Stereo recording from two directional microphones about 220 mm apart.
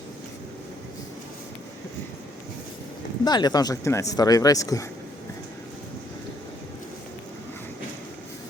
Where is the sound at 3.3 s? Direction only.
20° left (ahead or behind).